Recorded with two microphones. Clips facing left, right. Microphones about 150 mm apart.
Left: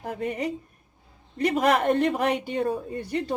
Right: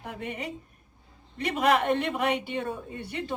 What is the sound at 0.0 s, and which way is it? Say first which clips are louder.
A woman's voice: left 7 dB; 40° left (ahead or behind).